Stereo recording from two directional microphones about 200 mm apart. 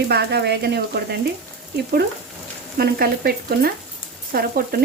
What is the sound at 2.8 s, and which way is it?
Speech, 50° right (ahead or behind).